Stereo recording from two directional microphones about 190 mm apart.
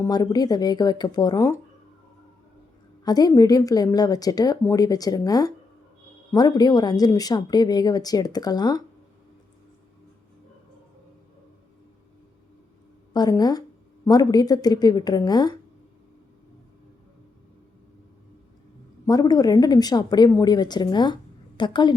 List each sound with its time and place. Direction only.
0.0 s a woman's voice: 20° left (ahead or behind)
3.0 s a woman's voice: 20° left (ahead or behind)
13.1 s a woman's voice: 20° left (ahead or behind)
19.0 s a woman's voice: 20° left (ahead or behind)